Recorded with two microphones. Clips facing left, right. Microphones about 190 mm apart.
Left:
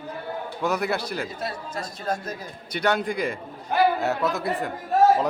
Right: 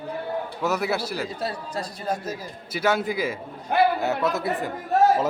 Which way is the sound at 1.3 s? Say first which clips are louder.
Right 2 dB; 35° right (ahead or behind).